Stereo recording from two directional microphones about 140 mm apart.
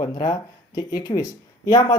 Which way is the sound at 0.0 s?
30° left (ahead or behind).